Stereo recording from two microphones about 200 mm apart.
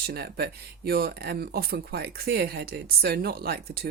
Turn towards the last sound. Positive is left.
turn(degrees=-50)  # may be behind; listen again after turning